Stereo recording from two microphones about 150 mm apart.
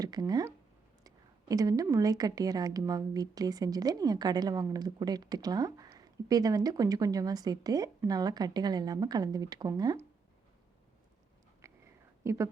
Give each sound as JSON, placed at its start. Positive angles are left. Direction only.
{"t": 0.0, "sound": "a woman's voice", "side_deg": -25}
{"t": 11.6, "sound": "whispering", "side_deg": -20}
{"t": 12.2, "sound": "speech", "side_deg": -20}